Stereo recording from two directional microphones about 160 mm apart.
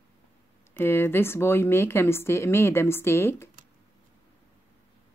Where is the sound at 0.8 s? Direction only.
15° left (ahead or behind).